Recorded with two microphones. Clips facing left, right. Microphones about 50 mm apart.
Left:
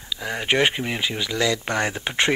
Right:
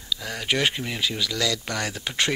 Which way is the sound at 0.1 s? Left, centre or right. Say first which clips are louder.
Left 3 dB; left.